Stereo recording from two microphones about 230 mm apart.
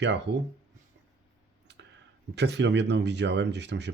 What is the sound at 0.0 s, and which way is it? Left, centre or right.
Speech, right.